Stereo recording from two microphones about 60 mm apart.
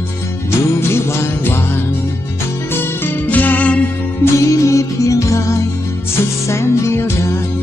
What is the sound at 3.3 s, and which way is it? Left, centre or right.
Music, left.